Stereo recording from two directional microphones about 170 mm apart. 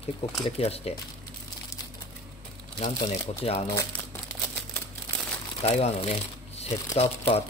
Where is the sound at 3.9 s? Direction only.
5° left (ahead or behind).